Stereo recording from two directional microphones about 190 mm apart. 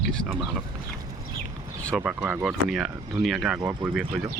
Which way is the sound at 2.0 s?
5° right (ahead or behind).